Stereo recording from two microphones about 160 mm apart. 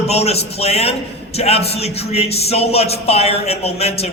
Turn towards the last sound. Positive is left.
turn(degrees=40)  # may be behind; listen again after turning